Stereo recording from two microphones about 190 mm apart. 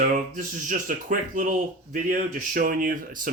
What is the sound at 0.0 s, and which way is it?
Speech, 45° right (ahead or behind).